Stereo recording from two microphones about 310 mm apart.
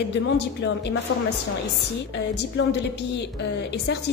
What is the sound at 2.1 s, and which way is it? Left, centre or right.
A woman's voice, left.